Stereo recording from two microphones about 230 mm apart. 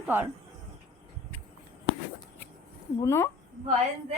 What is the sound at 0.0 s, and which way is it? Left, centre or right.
Speech, centre.